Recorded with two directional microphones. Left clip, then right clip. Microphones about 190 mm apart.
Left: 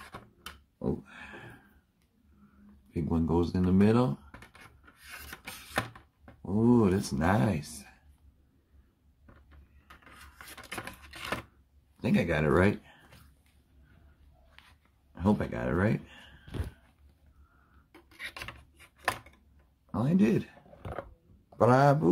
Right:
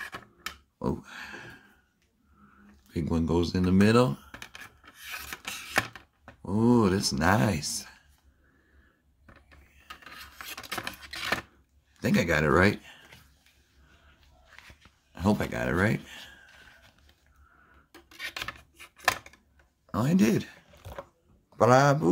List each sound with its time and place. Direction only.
0.7 s speech: 20° right (ahead or behind)
2.9 s speech: 20° right (ahead or behind)
4.3 s a sound: centre (ahead or behind)
6.5 s speech: 10° right (ahead or behind)
10.0 s filing: 10° right (ahead or behind)
12.0 s speech: 20° right (ahead or behind)
15.2 s speech: 15° right (ahead or behind)
17.9 s rub: 10° right (ahead or behind)
20.0 s speech: 25° right (ahead or behind)
21.5 s a man's voice: 5° right (ahead or behind)